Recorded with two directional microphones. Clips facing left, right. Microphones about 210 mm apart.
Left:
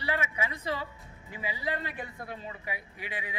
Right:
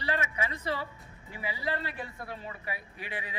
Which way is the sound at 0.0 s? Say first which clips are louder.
Even; 15° left (ahead or behind).